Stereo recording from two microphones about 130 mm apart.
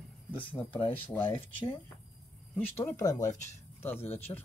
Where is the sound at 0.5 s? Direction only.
45° left (ahead or behind).